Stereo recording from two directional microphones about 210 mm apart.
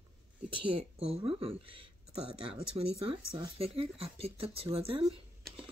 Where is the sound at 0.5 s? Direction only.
25° right (ahead or behind).